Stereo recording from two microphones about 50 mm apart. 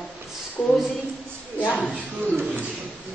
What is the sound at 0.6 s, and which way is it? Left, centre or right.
Speech, left.